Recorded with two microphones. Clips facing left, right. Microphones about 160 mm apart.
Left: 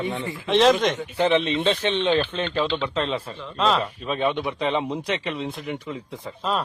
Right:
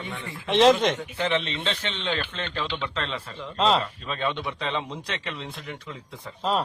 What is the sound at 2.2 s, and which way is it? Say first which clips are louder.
A man's voice: left 8 dB; 10° left (ahead or behind).